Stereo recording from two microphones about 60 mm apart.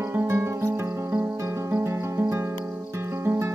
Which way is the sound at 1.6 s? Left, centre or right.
Right.